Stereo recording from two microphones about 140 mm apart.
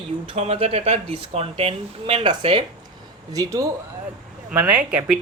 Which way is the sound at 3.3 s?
25° right (ahead or behind).